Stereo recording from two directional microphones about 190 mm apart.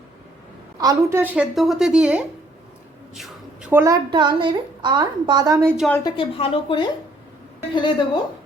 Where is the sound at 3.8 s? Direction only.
20° right (ahead or behind).